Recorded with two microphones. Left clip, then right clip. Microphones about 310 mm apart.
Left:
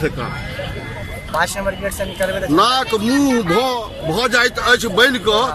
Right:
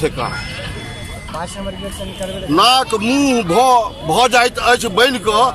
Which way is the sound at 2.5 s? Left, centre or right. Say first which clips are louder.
Right 4 dB; centre.